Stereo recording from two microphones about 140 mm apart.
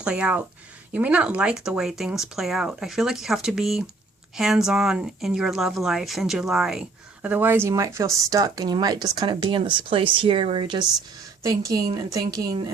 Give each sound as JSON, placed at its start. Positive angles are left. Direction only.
{"t": 0.0, "sound": "a woman's voice", "side_deg": -10}